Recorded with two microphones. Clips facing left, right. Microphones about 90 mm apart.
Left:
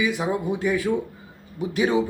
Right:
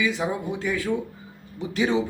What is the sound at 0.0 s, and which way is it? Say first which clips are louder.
Speech: left 2 dB; 15° left (ahead or behind).